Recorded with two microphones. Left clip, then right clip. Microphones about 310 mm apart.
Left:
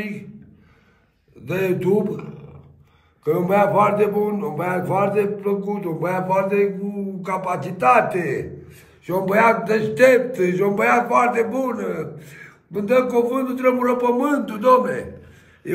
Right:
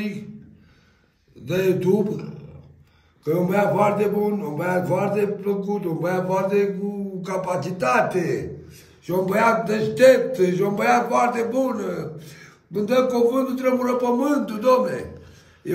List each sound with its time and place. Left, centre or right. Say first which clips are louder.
1.4 s a man's voice: even; centre
3.3 s a man's voice: left 3 dB; centre